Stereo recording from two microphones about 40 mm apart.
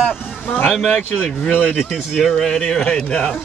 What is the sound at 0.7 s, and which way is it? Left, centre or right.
Speech, centre.